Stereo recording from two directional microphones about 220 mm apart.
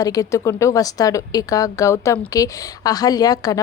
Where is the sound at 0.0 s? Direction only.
15° left (ahead or behind).